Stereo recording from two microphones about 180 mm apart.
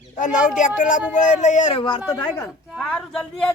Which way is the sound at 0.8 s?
45° left (ahead or behind).